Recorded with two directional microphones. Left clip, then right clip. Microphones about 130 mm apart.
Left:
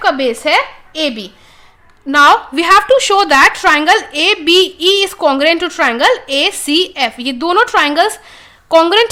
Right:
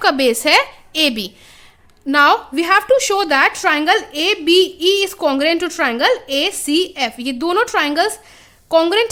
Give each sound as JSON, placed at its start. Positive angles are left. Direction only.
{"t": 0.0, "sound": "a woman's voice", "side_deg": -55}
{"t": 2.1, "sound": "speech", "side_deg": -25}